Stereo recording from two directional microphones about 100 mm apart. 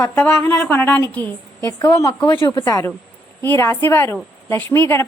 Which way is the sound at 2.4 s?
25° left (ahead or behind).